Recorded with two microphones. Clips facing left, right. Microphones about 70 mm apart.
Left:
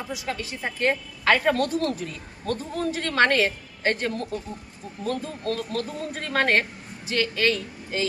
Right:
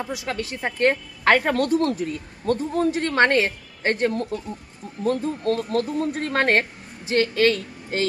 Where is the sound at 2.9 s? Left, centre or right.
Right.